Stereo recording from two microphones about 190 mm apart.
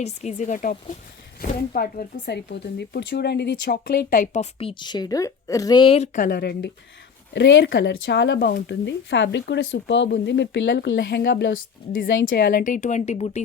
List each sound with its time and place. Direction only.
0.0 s speech: 35° left (ahead or behind); by 6.7 s 55° left (ahead or behind)
7.3 s speech: 70° left (ahead or behind)
12.2 s speech: 50° left (ahead or behind)